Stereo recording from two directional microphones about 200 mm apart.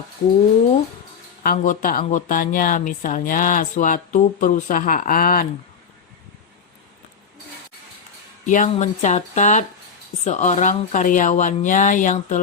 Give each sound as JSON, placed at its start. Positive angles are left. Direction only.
{"t": 1.5, "sound": "speech", "side_deg": 45}
{"t": 8.4, "sound": "speech", "side_deg": 40}